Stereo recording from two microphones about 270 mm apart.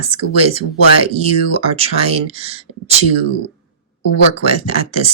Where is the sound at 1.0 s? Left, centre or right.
Right.